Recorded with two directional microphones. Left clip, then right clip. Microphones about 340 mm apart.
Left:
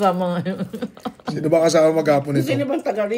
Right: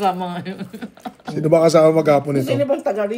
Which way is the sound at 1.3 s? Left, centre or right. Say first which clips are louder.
Right 3 dB; right.